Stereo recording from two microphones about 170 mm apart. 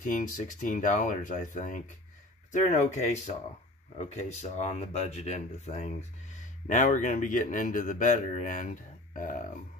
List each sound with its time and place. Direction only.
0.0 s a man's voice: 50° left (ahead or behind)